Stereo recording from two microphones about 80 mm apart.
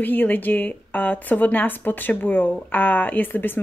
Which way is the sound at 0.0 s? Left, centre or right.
Left.